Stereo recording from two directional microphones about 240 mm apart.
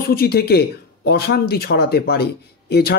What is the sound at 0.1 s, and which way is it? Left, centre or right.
Speech, left.